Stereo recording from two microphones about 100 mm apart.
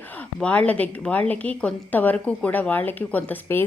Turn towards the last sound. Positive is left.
turn(degrees=20)  # may be behind; listen again after turning